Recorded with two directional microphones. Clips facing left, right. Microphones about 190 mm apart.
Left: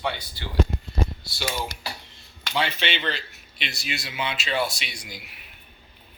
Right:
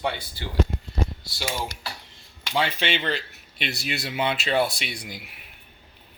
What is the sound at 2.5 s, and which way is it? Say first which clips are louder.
Speech: right 2 dB; 45° right (ahead or behind).